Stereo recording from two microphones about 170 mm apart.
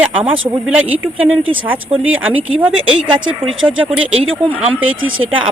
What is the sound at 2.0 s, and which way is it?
Speech, 10° right (ahead or behind).